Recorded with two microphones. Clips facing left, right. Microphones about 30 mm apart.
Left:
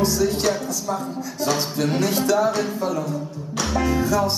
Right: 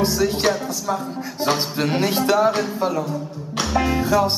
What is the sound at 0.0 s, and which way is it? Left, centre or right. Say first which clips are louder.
Speech: right 1 dB; right.